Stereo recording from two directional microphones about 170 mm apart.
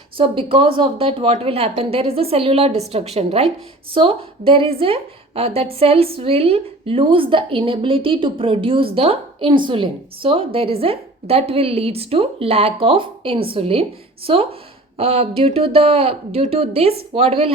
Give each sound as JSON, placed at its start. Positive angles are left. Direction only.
{"t": 0.2, "sound": "a woman's voice", "side_deg": -30}